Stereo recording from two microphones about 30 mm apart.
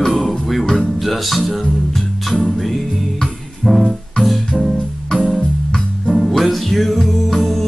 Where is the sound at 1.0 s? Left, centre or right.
Centre.